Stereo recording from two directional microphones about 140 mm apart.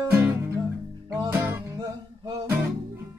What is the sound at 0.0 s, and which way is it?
Music, 20° right (ahead or behind).